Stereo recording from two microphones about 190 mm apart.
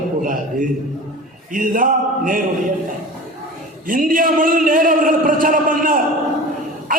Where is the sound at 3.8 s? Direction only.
45° right (ahead or behind).